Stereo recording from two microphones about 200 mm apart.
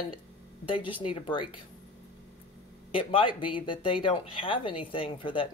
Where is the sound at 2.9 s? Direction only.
25° left (ahead or behind).